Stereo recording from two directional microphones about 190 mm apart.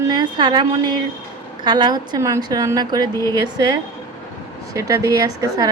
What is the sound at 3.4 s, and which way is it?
A woman's voice, 20° right (ahead or behind).